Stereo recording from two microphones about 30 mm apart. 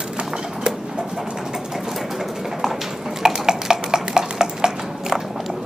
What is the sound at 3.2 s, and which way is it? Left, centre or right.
Stir, centre.